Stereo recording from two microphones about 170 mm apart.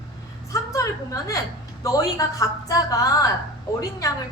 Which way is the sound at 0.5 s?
20° left (ahead or behind).